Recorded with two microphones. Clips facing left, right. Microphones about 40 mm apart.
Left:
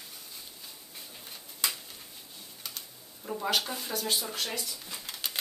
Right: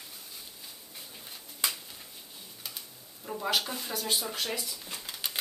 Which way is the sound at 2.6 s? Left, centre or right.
Centre.